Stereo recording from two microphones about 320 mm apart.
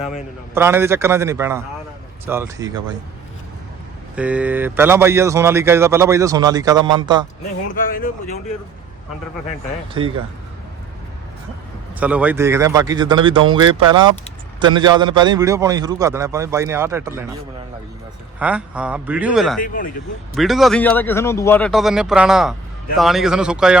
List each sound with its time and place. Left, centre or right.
0.0 s speech: centre
4.1 s speech: centre
7.8 s speech: left
11.9 s speech: centre
18.3 s speech: centre
19.6 s speech: left
20.3 s speech: centre